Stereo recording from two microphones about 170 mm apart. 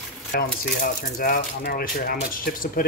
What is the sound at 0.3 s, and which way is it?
Speech, 60° left (ahead or behind).